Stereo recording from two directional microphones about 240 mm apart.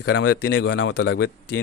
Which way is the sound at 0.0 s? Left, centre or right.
Left.